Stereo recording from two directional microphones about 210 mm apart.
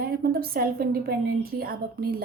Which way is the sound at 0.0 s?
45° right (ahead or behind).